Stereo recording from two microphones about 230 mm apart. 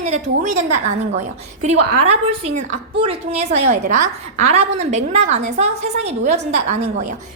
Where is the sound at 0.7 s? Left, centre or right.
Right.